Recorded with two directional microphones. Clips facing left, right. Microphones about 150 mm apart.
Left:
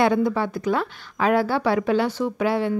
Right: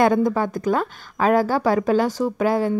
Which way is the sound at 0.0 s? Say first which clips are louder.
Right 2 dB; 45° right (ahead or behind).